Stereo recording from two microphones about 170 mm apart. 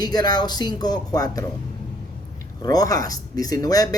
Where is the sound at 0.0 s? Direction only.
25° left (ahead or behind).